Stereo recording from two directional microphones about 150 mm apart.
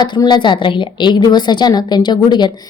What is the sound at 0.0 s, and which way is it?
A woman's voice, 30° left (ahead or behind).